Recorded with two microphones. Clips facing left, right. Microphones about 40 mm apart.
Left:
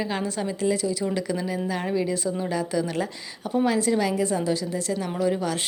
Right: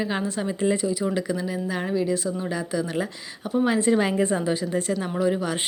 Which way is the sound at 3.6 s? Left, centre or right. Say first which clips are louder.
Right 2 dB; right.